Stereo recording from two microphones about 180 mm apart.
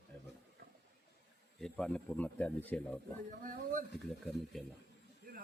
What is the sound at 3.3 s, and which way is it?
Speech, 45° right (ahead or behind).